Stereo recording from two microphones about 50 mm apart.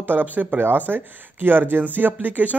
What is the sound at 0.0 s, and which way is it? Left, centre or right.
Speech, right.